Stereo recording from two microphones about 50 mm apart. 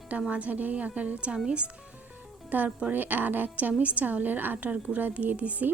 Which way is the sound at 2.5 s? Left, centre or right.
Right.